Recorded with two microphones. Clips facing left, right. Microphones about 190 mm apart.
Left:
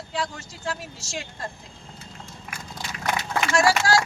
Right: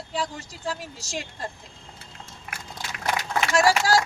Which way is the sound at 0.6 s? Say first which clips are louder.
Even; 35° right (ahead or behind).